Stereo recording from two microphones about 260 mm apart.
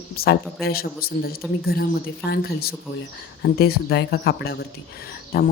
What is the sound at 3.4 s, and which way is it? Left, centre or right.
Speech, left.